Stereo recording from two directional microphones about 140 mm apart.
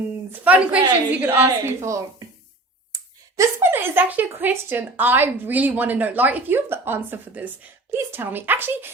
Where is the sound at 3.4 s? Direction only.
20° right (ahead or behind).